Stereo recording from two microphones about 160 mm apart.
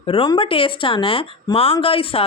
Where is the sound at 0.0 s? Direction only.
30° left (ahead or behind).